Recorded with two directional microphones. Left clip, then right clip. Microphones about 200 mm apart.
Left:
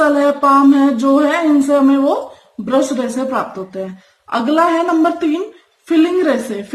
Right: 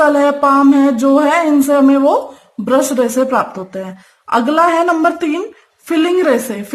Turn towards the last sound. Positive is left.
turn(degrees=-55)  # may be behind; listen again after turning